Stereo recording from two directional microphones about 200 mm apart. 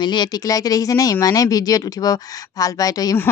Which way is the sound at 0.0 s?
20° left (ahead or behind).